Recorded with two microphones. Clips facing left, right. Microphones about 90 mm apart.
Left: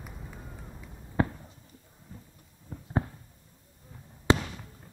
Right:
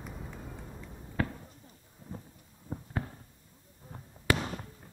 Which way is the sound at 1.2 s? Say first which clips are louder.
Left 5 dB; 25° left (ahead or behind).